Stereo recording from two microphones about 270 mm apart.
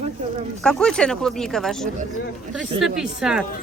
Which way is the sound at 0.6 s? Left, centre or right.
Centre.